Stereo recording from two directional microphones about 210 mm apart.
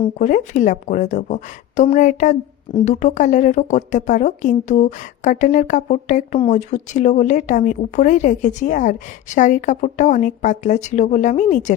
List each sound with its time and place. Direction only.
0.0 s speech: 35° left (ahead or behind)